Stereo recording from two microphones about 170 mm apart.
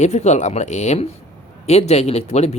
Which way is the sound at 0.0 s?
40° left (ahead or behind).